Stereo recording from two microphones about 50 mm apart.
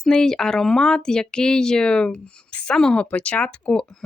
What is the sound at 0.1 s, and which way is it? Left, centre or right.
Speech, centre.